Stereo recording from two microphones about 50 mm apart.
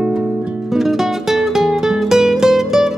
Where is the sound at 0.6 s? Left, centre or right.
Centre.